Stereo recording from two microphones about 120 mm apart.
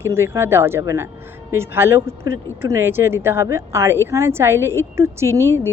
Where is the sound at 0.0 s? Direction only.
20° right (ahead or behind).